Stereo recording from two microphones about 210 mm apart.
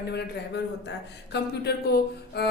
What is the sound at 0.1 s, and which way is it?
A man's voice, 55° left (ahead or behind).